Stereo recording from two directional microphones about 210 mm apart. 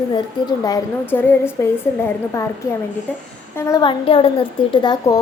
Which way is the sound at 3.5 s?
15° left (ahead or behind).